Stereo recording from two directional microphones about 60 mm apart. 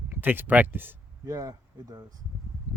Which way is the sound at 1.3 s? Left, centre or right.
Right.